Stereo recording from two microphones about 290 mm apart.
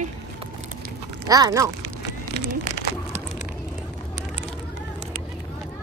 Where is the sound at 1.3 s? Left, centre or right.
Centre.